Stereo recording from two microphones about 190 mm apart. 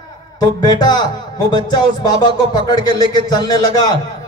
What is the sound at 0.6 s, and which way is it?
Speech, 20° left (ahead or behind).